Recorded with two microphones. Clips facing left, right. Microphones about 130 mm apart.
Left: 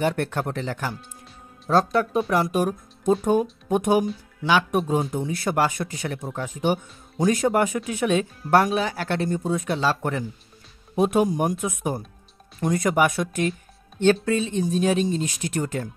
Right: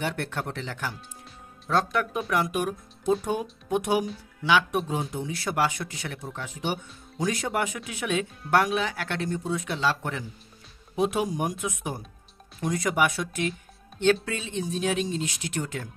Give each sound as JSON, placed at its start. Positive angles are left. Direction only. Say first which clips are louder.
{"t": 0.0, "sound": "speech", "louder": "left 6 dB", "side_deg": 45}
{"t": 14.2, "sound": "speech", "louder": "left 8 dB", "side_deg": 40}